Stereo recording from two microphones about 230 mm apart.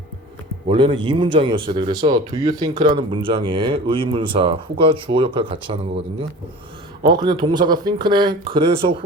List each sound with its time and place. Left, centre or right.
0.7 s speech: right